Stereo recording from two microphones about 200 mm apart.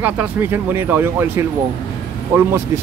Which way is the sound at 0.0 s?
10° right (ahead or behind).